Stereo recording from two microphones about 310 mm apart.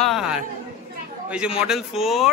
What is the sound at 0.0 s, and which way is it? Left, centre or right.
Chatter, centre.